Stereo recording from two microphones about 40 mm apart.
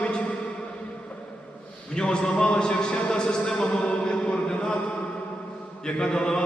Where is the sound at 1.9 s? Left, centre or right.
Left.